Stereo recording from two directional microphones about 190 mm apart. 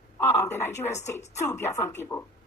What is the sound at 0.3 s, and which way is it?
A woman's voice, 15° left (ahead or behind).